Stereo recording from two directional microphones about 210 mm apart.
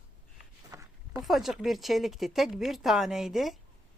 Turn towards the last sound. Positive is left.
turn(degrees=0)  # may be behind; listen again after turning